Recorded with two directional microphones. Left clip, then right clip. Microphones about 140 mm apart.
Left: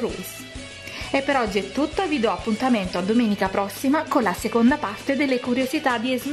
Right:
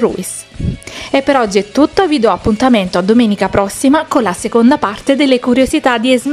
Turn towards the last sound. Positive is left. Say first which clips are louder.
# right 11 dB
turn(degrees=-30)  # may be behind; listen again after turning